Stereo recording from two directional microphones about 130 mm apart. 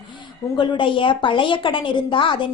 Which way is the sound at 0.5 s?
35° left (ahead or behind).